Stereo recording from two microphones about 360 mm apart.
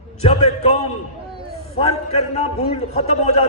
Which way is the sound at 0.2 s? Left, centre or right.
Centre.